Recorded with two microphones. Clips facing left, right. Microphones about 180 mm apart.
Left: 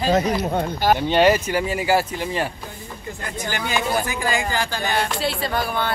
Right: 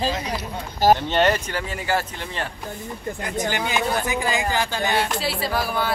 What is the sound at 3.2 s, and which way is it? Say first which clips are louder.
Speech: right 2 dB; 20° right (ahead or behind).